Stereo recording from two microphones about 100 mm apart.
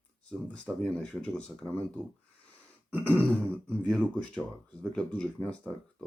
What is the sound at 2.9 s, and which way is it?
Beatboxing, 20° right (ahead or behind).